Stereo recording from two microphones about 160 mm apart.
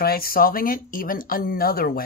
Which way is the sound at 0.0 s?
70° left (ahead or behind).